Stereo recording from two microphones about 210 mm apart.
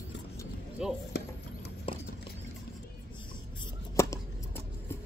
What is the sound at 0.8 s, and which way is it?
Chop, 5° right (ahead or behind).